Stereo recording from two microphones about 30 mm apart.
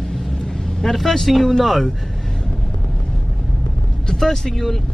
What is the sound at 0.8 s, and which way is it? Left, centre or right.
Speech, centre.